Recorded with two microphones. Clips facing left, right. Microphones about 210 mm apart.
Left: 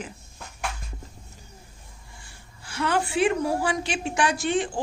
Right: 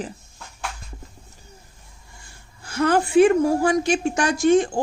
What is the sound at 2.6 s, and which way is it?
Speech, 45° right (ahead or behind).